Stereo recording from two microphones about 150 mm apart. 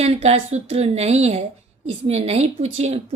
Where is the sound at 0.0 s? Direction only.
45° right (ahead or behind).